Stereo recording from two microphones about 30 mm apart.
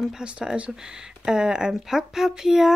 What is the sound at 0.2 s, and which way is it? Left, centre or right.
Speech, right.